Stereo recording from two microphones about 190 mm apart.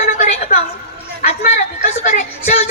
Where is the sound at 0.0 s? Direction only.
35° left (ahead or behind).